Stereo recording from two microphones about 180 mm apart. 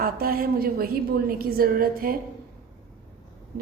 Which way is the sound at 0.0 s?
55° right (ahead or behind).